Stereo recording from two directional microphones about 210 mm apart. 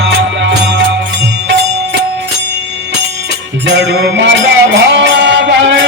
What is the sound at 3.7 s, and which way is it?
Music, 55° right (ahead or behind).